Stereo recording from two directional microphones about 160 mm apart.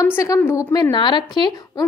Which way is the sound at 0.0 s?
20° left (ahead or behind).